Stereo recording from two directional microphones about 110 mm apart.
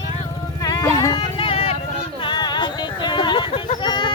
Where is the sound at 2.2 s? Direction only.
45° left (ahead or behind).